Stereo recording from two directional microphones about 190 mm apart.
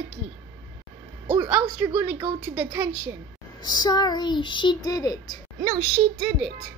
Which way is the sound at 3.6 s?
20° left (ahead or behind).